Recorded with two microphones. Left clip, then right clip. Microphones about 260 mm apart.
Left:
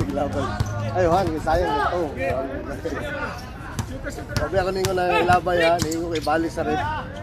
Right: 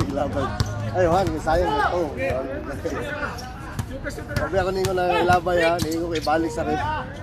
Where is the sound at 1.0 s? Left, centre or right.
Centre.